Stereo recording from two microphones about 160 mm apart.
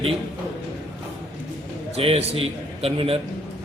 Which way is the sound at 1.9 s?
40° right (ahead or behind).